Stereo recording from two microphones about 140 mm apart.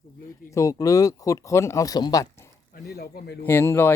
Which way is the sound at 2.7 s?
90° left.